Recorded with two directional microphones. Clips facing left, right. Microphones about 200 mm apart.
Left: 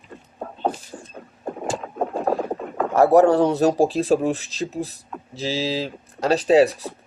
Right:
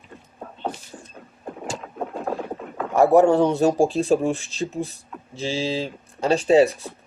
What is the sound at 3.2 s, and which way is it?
Speech, 35° left (ahead or behind).